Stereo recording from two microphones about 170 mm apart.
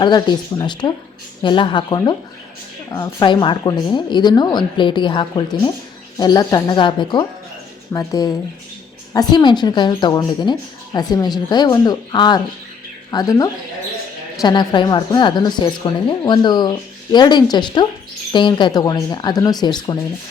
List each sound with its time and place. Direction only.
0.0 s a woman's voice: 25° left (ahead or behind)